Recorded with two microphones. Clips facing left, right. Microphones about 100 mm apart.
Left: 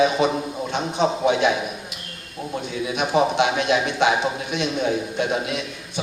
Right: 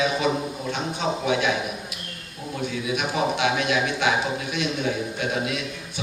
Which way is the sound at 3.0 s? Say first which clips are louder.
Left 6 dB; 25° left (ahead or behind).